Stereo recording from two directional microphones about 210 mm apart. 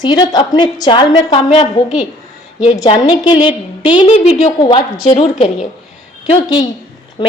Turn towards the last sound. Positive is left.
turn(degrees=20)  # may be behind; listen again after turning